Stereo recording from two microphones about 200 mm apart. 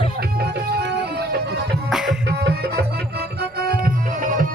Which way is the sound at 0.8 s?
55° right (ahead or behind).